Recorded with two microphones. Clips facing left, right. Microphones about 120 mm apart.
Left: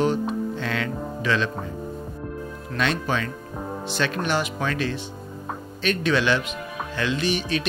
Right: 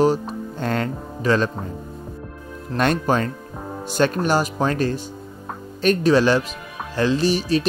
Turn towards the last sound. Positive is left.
turn(degrees=-35)  # may be behind; listen again after turning